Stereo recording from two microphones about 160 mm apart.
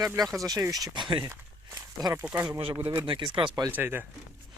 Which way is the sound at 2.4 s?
30° right (ahead or behind).